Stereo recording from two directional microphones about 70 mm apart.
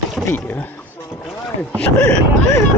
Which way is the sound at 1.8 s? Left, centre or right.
Centre.